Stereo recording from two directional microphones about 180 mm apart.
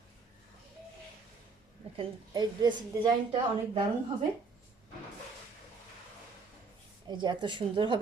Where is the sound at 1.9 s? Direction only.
25° right (ahead or behind).